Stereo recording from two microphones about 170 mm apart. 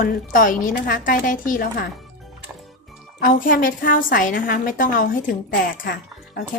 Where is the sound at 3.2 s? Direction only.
55° left (ahead or behind).